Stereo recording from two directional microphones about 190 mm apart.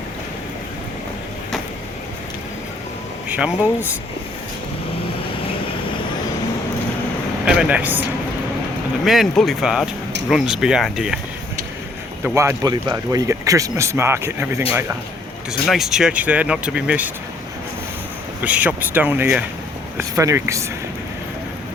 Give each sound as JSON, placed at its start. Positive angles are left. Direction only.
{"t": 3.2, "sound": "speech", "side_deg": -10}
{"t": 7.4, "sound": "speech", "side_deg": -5}
{"t": 9.0, "sound": "speech", "side_deg": 0}
{"t": 12.2, "sound": "speech", "side_deg": -15}
{"t": 15.6, "sound": "speech", "side_deg": 0}
{"t": 18.4, "sound": "speech", "side_deg": -10}